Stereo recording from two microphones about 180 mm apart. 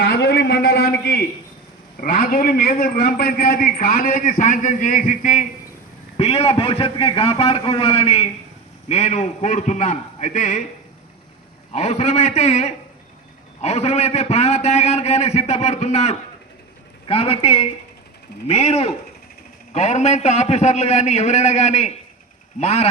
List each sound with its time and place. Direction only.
0.0 s a sound: 65° left (ahead or behind)
2.0 s a man's voice: 45° left (ahead or behind)
11.7 s a man's voice: 35° left (ahead or behind)